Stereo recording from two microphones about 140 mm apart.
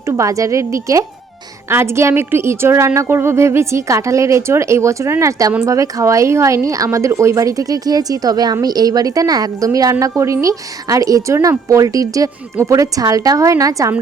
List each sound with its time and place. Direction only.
0.0 s a woman's voice: 20° right (ahead or behind)